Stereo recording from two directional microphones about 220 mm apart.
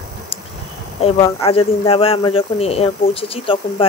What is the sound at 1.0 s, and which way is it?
A man's voice, 25° left (ahead or behind).